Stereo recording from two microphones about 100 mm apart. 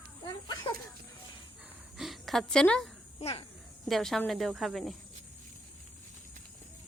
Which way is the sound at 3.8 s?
Centre (ahead or behind).